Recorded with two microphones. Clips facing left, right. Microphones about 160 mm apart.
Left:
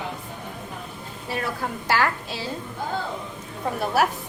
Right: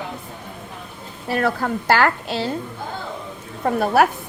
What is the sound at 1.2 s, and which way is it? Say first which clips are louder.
A woman's voice: right 8 dB; 65° right (ahead or behind).